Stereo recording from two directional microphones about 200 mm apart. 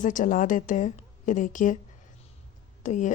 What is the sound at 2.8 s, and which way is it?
Speech, 40° left (ahead or behind).